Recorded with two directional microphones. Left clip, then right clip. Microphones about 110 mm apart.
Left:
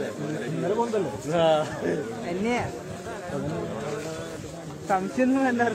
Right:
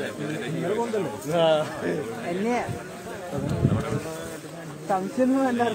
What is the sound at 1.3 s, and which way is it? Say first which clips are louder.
Speech: right 1 dB; 35° right (ahead or behind).